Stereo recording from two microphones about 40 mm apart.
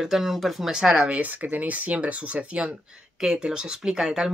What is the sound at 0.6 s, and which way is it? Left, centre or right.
Speech, centre.